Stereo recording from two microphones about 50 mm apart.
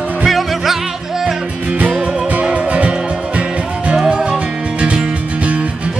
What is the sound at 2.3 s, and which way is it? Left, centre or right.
Music, right.